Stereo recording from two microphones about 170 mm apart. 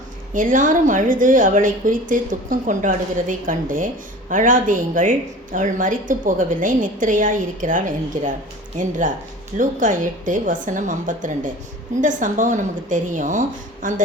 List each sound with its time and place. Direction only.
0.3 s a woman's voice: 50° right (ahead or behind)